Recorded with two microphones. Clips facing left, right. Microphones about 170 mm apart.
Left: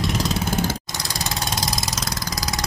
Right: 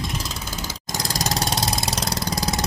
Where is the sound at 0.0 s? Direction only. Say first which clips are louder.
Left 7 dB; 70° left (ahead or behind); by 0.8 s 55° left (ahead or behind).